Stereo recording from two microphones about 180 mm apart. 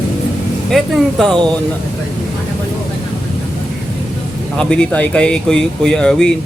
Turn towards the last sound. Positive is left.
turn(degrees=5)  # may be behind; listen again after turning